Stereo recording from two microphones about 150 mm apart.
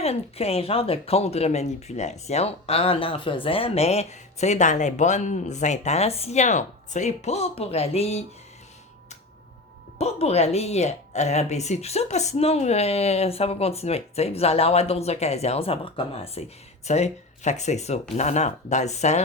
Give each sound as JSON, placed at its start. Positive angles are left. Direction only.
{"t": 0.0, "sound": "speech", "side_deg": 40}
{"t": 10.0, "sound": "speech", "side_deg": 45}